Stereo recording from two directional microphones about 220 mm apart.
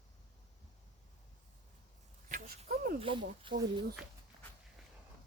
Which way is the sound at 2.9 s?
25° right (ahead or behind).